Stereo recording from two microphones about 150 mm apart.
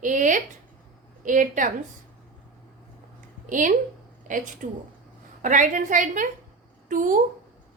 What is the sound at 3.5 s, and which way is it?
A woman's voice, 60° right (ahead or behind).